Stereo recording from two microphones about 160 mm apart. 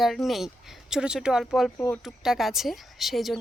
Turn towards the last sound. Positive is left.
turn(degrees=0)  # may be behind; listen again after turning